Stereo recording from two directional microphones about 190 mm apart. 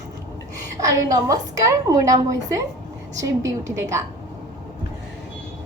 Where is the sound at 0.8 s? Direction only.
15° right (ahead or behind).